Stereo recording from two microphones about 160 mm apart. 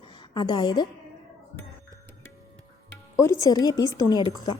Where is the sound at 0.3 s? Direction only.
30° left (ahead or behind).